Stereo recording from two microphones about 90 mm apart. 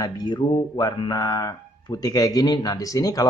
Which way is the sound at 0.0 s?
50° left (ahead or behind).